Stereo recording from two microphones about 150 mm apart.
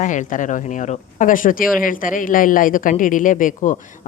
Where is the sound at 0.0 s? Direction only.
60° left (ahead or behind).